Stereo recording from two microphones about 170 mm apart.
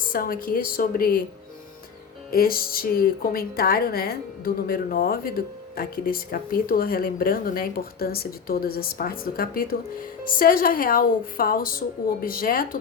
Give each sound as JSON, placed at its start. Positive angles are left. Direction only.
{"t": 0.0, "sound": "speech", "side_deg": 55}
{"t": 2.3, "sound": "speech", "side_deg": 60}